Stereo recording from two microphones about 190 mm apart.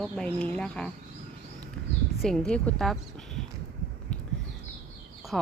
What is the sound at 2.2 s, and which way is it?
Speech, centre (ahead or behind).